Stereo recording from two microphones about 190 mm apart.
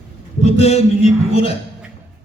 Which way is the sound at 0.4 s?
35° left (ahead or behind).